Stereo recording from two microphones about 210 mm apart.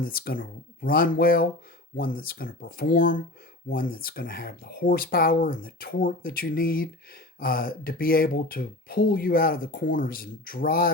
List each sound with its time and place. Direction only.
0.0 s speech: 45° left (ahead or behind)